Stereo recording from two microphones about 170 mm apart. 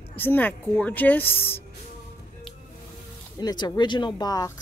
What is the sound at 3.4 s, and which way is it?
Speech, 20° left (ahead or behind).